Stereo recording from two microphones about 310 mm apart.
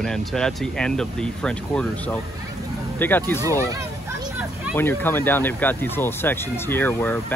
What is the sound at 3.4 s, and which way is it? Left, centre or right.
Vehicle, centre.